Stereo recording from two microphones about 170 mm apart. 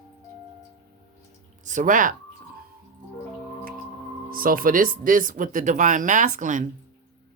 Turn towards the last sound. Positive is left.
turn(degrees=-50)  # may be behind; listen again after turning